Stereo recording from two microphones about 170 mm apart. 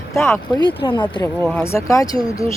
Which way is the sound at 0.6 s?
30° left (ahead or behind).